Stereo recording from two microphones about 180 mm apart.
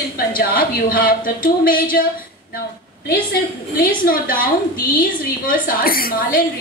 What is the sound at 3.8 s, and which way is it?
A woman's voice, 50° left (ahead or behind).